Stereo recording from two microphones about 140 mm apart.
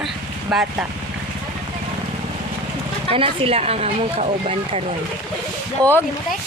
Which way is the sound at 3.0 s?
40° right (ahead or behind).